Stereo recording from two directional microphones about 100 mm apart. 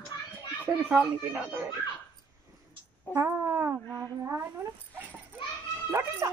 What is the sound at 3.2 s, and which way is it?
Cat, 25° right (ahead or behind).